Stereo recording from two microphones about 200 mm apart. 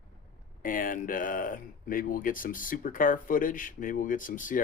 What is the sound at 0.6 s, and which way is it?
Speech, 45° left (ahead or behind).